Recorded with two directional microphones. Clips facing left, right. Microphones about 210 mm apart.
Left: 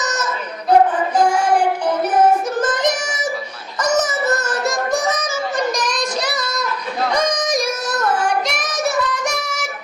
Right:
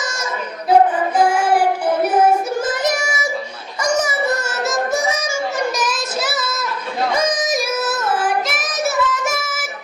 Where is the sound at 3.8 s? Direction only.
10° right (ahead or behind).